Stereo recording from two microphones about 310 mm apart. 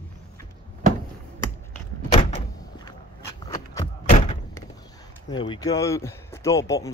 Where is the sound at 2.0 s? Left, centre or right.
Centre.